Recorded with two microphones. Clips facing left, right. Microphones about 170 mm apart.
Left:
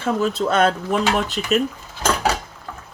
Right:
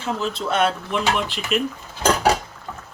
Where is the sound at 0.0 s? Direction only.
45° left (ahead or behind).